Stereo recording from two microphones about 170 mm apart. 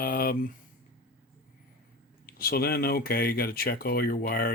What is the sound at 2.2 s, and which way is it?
Speech, 60° left (ahead or behind).